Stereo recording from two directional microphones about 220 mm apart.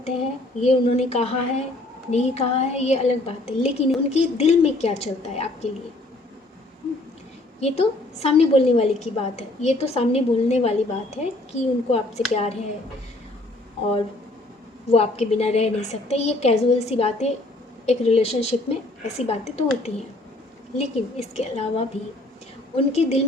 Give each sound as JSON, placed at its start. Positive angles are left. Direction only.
{"t": 0.6, "sound": "a woman's voice", "side_deg": 30}
{"t": 7.6, "sound": "a woman's voice", "side_deg": 30}
{"t": 14.8, "sound": "a woman's voice", "side_deg": 30}